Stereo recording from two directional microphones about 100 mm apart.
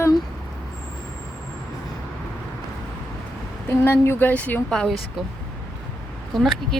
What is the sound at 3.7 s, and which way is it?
A woman's voice, 25° left (ahead or behind).